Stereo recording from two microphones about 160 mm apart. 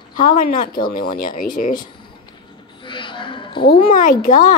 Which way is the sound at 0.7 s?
60° left (ahead or behind).